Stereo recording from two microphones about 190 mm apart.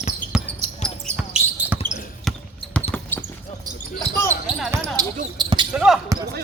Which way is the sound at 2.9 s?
10° left (ahead or behind).